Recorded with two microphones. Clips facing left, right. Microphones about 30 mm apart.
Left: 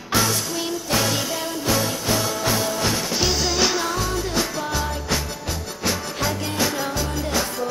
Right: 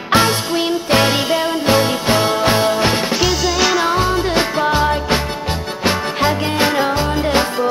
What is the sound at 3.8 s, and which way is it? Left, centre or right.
Music, right.